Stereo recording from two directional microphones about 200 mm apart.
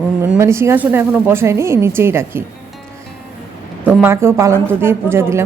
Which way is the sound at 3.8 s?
10° right (ahead or behind).